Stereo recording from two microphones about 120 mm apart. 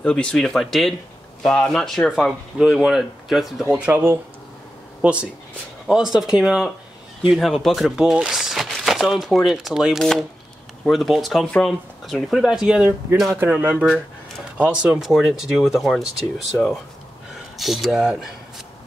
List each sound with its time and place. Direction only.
0.0 s speech: 10° left (ahead or behind)
3.6 s speech: 15° right (ahead or behind)